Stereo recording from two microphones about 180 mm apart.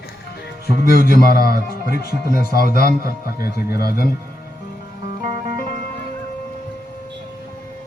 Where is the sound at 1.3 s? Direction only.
55° left (ahead or behind).